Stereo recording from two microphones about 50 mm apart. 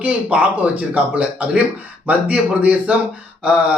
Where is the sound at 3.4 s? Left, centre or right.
Right.